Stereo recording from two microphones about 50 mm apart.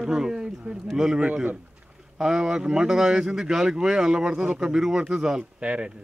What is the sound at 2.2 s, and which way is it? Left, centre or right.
Speech, centre.